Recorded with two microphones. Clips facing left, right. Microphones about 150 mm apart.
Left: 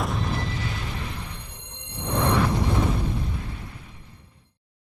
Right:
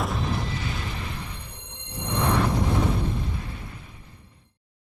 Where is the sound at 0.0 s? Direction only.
Centre (ahead or behind).